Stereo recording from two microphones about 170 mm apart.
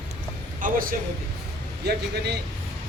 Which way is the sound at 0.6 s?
55° right (ahead or behind).